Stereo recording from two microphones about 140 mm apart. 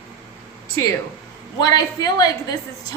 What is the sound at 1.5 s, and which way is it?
A woman's voice, 30° left (ahead or behind).